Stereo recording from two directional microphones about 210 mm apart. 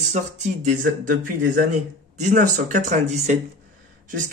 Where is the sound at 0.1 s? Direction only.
35° right (ahead or behind).